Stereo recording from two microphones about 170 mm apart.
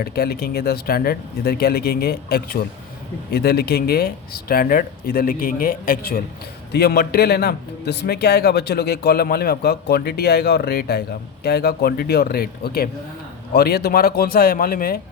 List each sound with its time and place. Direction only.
0.0 s a man's voice: 65° left (ahead or behind)